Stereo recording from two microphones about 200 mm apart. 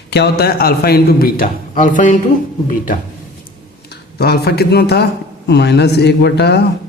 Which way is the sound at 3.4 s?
55° left (ahead or behind).